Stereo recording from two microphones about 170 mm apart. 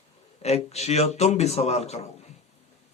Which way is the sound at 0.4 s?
40° left (ahead or behind).